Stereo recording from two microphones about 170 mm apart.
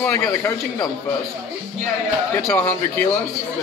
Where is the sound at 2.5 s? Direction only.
15° left (ahead or behind).